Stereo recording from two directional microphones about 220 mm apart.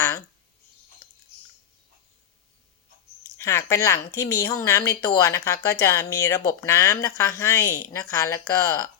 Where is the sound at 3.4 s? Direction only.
15° left (ahead or behind).